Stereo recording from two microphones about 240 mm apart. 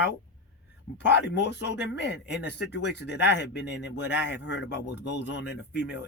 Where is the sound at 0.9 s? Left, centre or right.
Left.